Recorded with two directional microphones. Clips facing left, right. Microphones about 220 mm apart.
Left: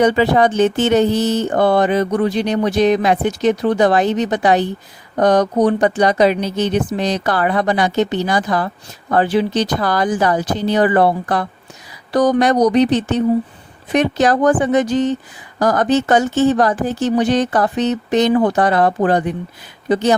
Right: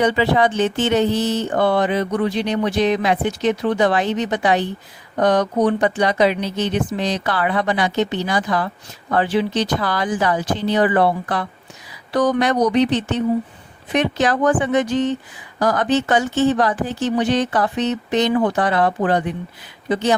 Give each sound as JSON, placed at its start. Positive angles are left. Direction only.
{"t": 0.0, "sound": "speech", "side_deg": 45}